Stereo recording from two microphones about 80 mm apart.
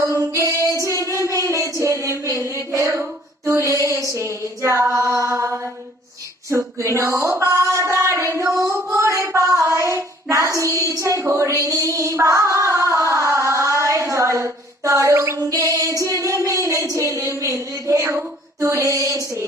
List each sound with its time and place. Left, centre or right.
0.1 s music: right
1.1 s a sound: right
3.0 s female singing: right
6.5 s speech: right
7.8 s a sound: right
8.9 s child singing: right
15.4 s female singing: right
16.2 s a sound: right
18.6 s female singing: right